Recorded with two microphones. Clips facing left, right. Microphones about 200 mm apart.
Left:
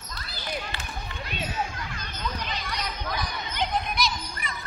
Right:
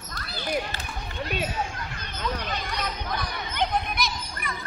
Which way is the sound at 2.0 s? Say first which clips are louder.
Right 4 dB; 60° right (ahead or behind).